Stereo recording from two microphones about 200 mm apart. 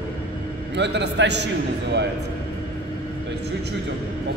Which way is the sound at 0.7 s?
60° right (ahead or behind).